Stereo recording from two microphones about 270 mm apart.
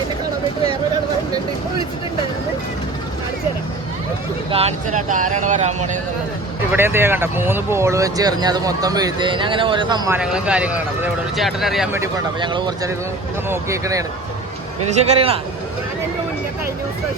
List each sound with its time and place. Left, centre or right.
4.5 s speech: right
6.7 s speech: centre
10.2 s speech: centre
12.1 s speech: centre
14.8 s speech: right